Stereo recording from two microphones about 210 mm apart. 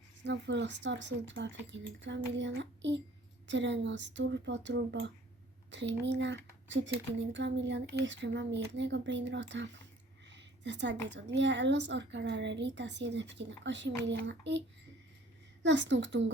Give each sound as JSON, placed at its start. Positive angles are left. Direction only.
{"t": 0.3, "sound": "speech", "side_deg": -55}
{"t": 10.2, "sound": "a sound", "side_deg": -55}
{"t": 11.1, "sound": "speech", "side_deg": -60}
{"t": 15.6, "sound": "speech", "side_deg": -60}